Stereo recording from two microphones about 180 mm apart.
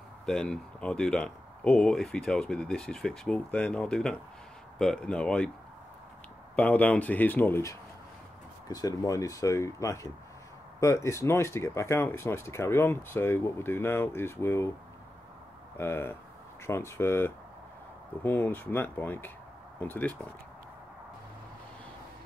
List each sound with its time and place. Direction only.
0.3 s speech: 5° left (ahead or behind)
6.5 s speech: 10° left (ahead or behind)
15.8 s speech: 10° left (ahead or behind)